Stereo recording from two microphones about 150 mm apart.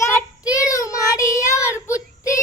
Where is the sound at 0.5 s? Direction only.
20° left (ahead or behind).